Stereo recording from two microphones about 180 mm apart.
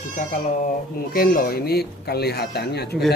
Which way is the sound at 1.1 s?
55° left (ahead or behind).